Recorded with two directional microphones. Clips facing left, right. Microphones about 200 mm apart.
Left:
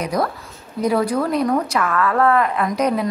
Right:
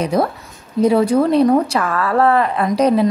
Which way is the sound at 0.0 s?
30° right (ahead or behind).